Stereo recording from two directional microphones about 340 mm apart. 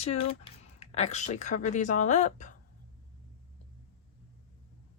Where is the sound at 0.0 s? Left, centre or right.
Centre.